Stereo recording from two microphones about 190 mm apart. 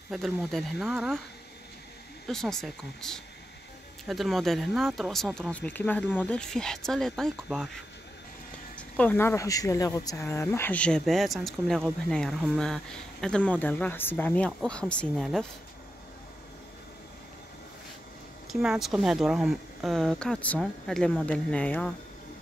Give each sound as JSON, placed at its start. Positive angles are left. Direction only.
{"t": 0.1, "sound": "speech", "side_deg": 0}
{"t": 2.2, "sound": "speech", "side_deg": 0}
{"t": 8.7, "sound": "speech", "side_deg": 10}
{"t": 18.5, "sound": "speech", "side_deg": 0}